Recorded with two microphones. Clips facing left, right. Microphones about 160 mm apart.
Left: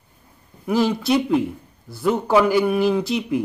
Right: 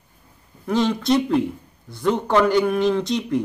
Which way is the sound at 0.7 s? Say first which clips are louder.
Even; 5° left (ahead or behind).